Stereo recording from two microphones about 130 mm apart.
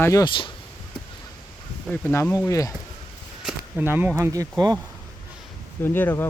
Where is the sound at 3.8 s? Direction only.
15° right (ahead or behind).